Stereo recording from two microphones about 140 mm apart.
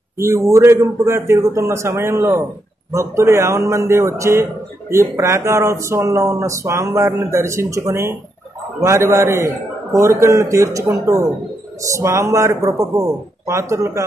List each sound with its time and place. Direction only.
0.2 s a man's voice: 20° right (ahead or behind)